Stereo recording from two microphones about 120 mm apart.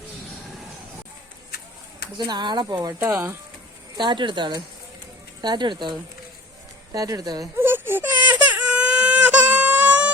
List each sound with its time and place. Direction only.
2.1 s speech: 35° right (ahead or behind)
3.1 s speech: 20° right (ahead or behind)
3.9 s speech: 40° right (ahead or behind)
6.9 s speech: 30° right (ahead or behind)
7.5 s baby cry: 20° right (ahead or behind)